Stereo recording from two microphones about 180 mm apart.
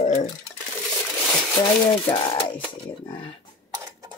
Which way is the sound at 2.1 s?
30° left (ahead or behind).